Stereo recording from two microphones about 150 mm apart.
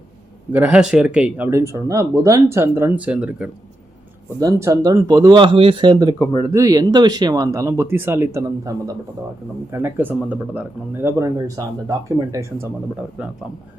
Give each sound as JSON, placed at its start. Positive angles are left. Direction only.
{"t": 0.5, "sound": "speech", "side_deg": -10}
{"t": 1.5, "sound": "speech", "side_deg": -20}
{"t": 4.4, "sound": "speech", "side_deg": -20}
{"t": 9.7, "sound": "speech", "side_deg": -15}
{"t": 13.2, "sound": "speech", "side_deg": -10}